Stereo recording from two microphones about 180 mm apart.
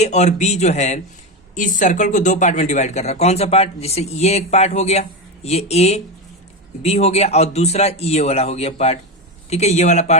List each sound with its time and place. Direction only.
0.0 s speech: 40° left (ahead or behind)